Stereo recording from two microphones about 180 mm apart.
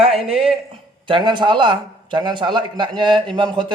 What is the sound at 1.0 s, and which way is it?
A man's voice, 25° right (ahead or behind).